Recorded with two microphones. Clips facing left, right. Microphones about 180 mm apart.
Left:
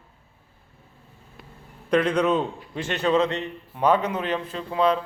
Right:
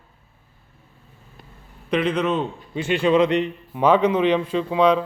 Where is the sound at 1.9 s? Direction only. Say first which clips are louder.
Left 1 dB; 5° right (ahead or behind).